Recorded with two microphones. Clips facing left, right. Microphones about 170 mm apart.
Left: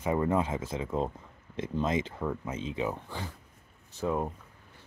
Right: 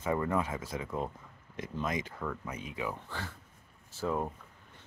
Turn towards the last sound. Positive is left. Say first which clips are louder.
# left 2 dB
turn(degrees=10)  # may be behind; listen again after turning